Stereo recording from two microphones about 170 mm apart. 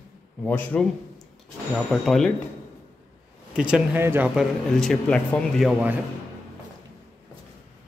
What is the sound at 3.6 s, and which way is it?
Speech, 10° right (ahead or behind).